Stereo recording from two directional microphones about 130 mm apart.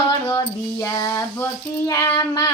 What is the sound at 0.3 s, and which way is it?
Child singing, 20° left (ahead or behind).